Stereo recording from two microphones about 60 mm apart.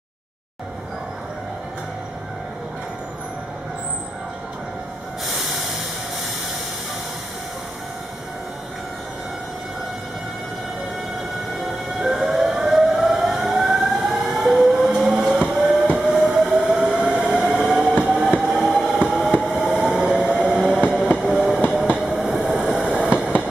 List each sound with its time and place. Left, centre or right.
5.2 s hiss: centre
11.6 s siren: centre
14.9 s train: centre
18.9 s train: centre
21.2 s train: centre